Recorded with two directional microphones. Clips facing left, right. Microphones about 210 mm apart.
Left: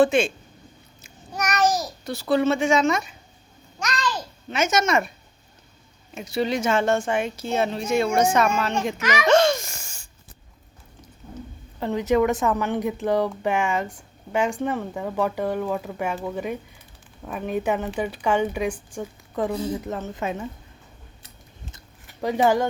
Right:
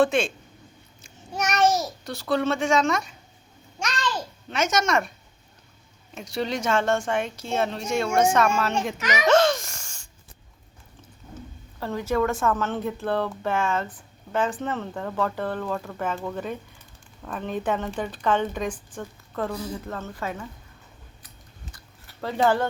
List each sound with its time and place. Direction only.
0.0 s a woman's voice: centre (ahead or behind)
1.4 s babbling: 25° right (ahead or behind)
2.0 s a woman's voice: centre (ahead or behind)
3.8 s a sound: 25° right (ahead or behind)
4.4 s a woman's voice: centre (ahead or behind)
6.1 s a woman's voice: 5° left (ahead or behind)
9.2 s music: centre (ahead or behind)
11.8 s a woman's voice: 20° left (ahead or behind)
21.2 s a sound: 20° left (ahead or behind)
22.4 s a woman's voice: 15° left (ahead or behind)